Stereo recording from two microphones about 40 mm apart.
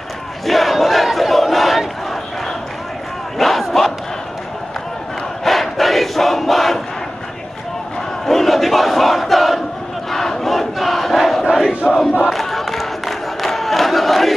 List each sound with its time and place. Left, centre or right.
0.5 s battle cry: centre
3.3 s battle cry: centre
5.4 s crowd: centre
8.3 s crowd: centre
11.8 s crowd: centre
12.3 s crowd: centre